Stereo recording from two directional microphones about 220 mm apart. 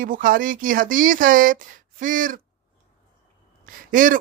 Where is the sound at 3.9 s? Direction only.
40° right (ahead or behind).